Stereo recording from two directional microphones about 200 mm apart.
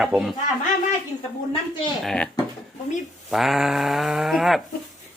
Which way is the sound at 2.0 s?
5° left (ahead or behind).